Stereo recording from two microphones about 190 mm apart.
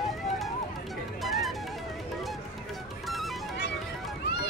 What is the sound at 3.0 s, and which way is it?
Music, centre (ahead or behind).